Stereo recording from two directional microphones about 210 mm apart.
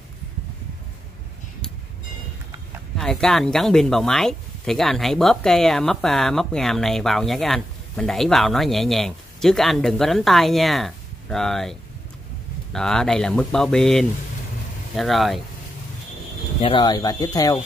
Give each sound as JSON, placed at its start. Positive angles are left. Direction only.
{"t": 3.0, "sound": "speech", "side_deg": 0}
{"t": 16.6, "sound": "speech", "side_deg": 20}